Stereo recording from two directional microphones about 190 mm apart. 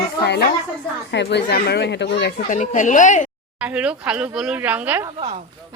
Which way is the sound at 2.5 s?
40° left (ahead or behind).